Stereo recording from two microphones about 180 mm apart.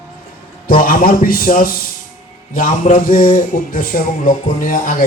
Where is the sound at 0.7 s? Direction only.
50° left (ahead or behind).